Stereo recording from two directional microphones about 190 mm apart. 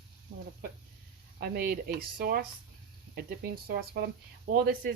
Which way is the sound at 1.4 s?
50° right (ahead or behind).